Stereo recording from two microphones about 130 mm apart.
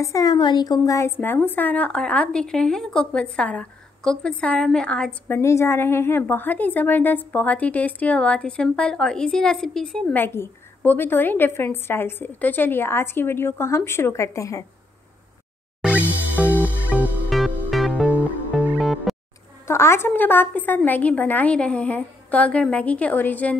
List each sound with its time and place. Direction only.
0.0 s a woman's voice: 30° left (ahead or behind); by 5.4 s 10° left (ahead or behind)
5.4 s a woman's voice: 20° left (ahead or behind); by 10.0 s 5° left (ahead or behind)
10.1 s a woman's voice: 20° left (ahead or behind)
15.8 s music: 10° right (ahead or behind)
17.3 s music: centre (ahead or behind)
19.7 s a woman's voice: 20° left (ahead or behind)